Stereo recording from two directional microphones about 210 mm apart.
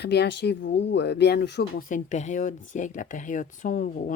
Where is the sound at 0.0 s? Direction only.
50° left (ahead or behind).